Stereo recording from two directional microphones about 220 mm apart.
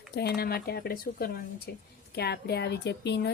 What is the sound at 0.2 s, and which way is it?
A woman's voice, 45° left (ahead or behind).